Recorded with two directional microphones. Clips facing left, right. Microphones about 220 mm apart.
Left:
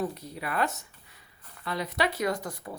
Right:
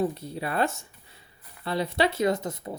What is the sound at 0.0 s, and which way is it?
A woman's voice, 25° right (ahead or behind).